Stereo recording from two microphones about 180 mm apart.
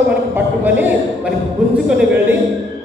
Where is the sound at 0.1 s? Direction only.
10° right (ahead or behind).